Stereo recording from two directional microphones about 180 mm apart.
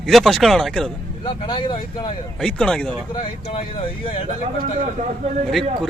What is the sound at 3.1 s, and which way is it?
Speech, 30° left (ahead or behind).